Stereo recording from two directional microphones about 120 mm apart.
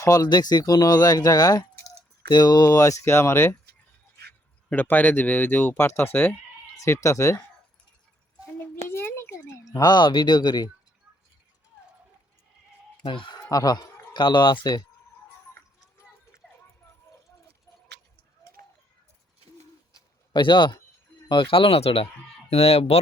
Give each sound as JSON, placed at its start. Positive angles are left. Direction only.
{"t": 0.0, "sound": "speech", "side_deg": 30}
{"t": 4.7, "sound": "speech", "side_deg": 15}
{"t": 8.9, "sound": "a sound", "side_deg": 20}
{"t": 13.1, "sound": "speech", "side_deg": 40}
{"t": 20.3, "sound": "speech", "side_deg": 40}